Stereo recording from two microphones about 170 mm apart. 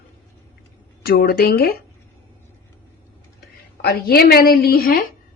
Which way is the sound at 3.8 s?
65° left (ahead or behind).